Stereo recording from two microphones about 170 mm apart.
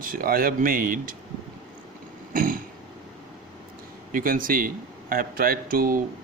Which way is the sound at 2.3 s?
55° right (ahead or behind).